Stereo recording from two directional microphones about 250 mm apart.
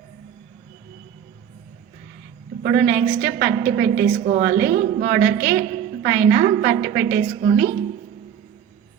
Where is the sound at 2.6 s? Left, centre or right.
Right.